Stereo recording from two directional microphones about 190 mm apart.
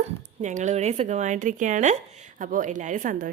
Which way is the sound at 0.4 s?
40° right (ahead or behind).